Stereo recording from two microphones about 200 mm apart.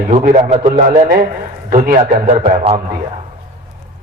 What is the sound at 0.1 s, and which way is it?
A man's voice, 35° right (ahead or behind).